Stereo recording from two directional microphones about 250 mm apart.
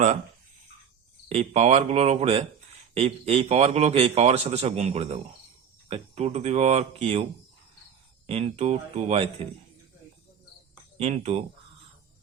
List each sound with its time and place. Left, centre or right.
1.3 s a man's voice: right
8.3 s a man's voice: right
10.9 s a man's voice: right